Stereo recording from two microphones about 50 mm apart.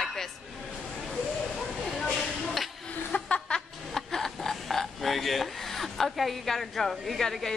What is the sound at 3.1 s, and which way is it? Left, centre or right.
Chuckle, left.